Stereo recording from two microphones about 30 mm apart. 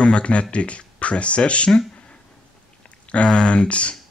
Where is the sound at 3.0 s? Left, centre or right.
Left.